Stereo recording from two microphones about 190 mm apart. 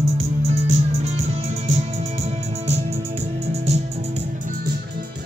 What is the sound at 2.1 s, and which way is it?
Music, 35° right (ahead or behind).